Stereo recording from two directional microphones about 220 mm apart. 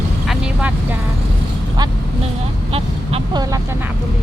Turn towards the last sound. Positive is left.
turn(degrees=-15)  # may be behind; listen again after turning